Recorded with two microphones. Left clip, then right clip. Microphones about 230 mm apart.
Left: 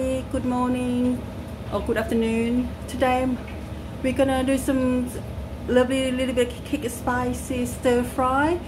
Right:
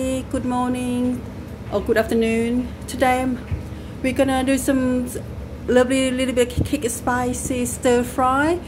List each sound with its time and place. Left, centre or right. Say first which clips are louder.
0.0 s music: right 1 dB; right
1.7 s a woman's voice: right 5 dB; right